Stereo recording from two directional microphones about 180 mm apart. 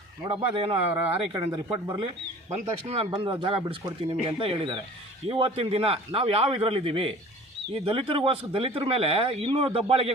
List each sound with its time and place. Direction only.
0.3 s speech: 30° right (ahead or behind)
2.5 s speech: 35° right (ahead or behind)